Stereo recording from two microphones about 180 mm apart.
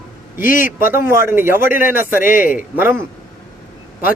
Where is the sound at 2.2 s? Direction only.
50° left (ahead or behind).